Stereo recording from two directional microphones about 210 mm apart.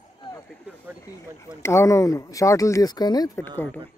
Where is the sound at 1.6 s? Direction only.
15° left (ahead or behind).